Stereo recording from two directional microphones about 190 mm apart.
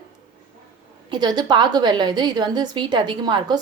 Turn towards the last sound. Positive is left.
turn(degrees=-25)  # may be behind; listen again after turning